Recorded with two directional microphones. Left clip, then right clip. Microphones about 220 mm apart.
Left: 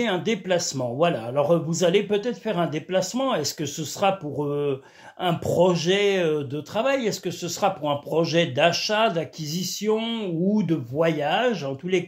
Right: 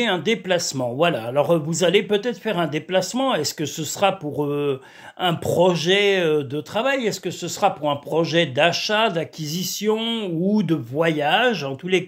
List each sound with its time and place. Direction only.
0.0 s speech: 30° right (ahead or behind)